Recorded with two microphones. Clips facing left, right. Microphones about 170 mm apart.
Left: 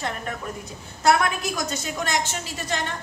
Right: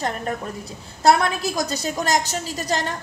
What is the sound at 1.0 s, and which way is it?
A woman's voice, 35° right (ahead or behind).